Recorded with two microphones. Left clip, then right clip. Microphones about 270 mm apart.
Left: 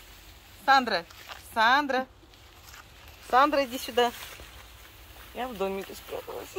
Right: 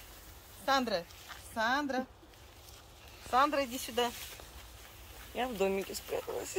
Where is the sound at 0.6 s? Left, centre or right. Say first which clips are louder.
Left 9 dB; centre.